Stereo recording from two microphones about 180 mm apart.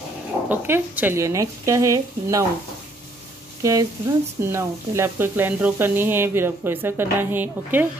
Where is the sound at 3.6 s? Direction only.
20° right (ahead or behind).